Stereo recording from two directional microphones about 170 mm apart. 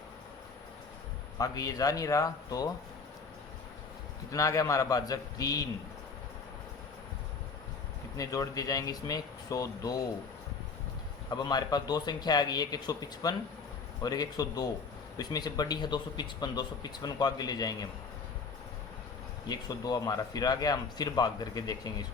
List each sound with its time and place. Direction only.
1.4 s a man's voice: 20° left (ahead or behind)
4.3 s a man's voice: 20° left (ahead or behind)
8.1 s a man's voice: 20° left (ahead or behind)
11.3 s a man's voice: 25° left (ahead or behind)
19.5 s a man's voice: 25° left (ahead or behind)